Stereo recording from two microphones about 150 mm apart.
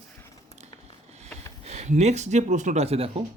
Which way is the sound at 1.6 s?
50° right (ahead or behind).